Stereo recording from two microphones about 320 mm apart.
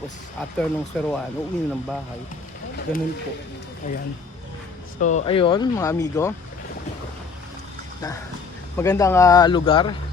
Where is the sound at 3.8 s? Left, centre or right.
Left.